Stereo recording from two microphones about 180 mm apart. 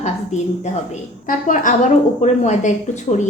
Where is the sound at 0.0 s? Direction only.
40° left (ahead or behind).